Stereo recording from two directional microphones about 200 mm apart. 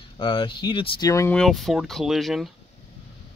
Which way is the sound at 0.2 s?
25° left (ahead or behind).